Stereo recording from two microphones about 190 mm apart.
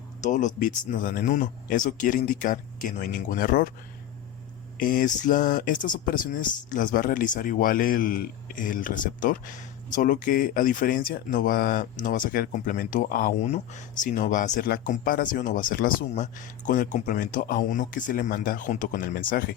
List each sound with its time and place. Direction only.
0.2 s speech: 40° left (ahead or behind)
4.8 s speech: 45° left (ahead or behind)